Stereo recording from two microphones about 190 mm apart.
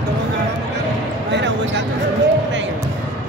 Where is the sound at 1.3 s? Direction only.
65° right (ahead or behind).